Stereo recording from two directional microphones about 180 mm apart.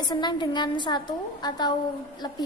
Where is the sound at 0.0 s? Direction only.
25° left (ahead or behind).